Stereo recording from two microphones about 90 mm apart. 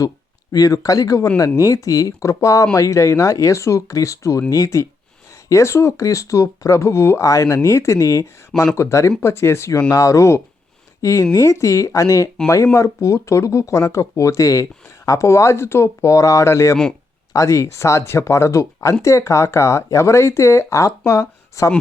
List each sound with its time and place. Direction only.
0.5 s speech: 40° left (ahead or behind)